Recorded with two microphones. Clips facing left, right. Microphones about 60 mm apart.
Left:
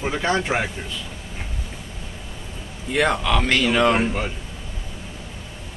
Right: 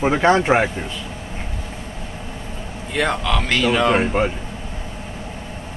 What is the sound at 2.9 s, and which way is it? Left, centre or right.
Speech, centre.